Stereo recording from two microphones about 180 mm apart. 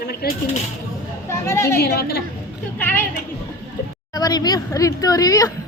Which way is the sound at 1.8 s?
60° left (ahead or behind).